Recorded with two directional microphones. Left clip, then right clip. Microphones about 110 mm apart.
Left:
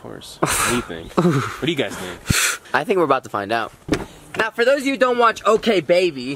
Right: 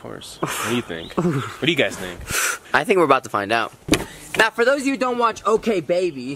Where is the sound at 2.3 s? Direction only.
25° left (ahead or behind).